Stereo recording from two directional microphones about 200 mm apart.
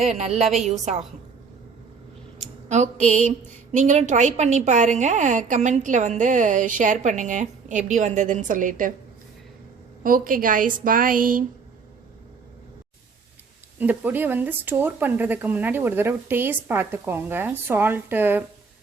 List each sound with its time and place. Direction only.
0.2 s a woman's voice: 35° right (ahead or behind)
2.6 s a woman's voice: 35° right (ahead or behind)
10.0 s a woman's voice: 45° right (ahead or behind)
13.7 s speech: 10° right (ahead or behind)